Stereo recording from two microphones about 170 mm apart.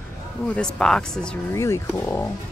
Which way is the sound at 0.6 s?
5° left (ahead or behind).